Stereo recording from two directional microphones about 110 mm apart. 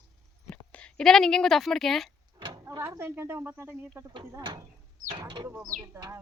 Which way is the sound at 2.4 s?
50° right (ahead or behind).